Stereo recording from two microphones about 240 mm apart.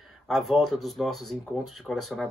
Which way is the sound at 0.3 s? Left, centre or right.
Centre.